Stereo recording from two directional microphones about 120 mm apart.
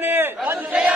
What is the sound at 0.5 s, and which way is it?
Battle cry, 10° right (ahead or behind).